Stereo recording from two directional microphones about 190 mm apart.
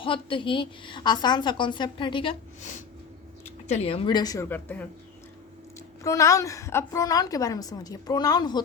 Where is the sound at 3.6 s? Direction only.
35° left (ahead or behind); by 4.8 s 10° left (ahead or behind).